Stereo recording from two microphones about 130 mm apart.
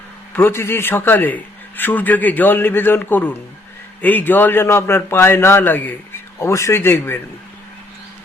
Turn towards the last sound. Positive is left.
turn(degrees=20)  # may be behind; listen again after turning